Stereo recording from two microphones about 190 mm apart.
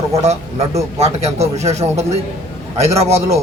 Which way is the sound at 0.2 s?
35° right (ahead or behind).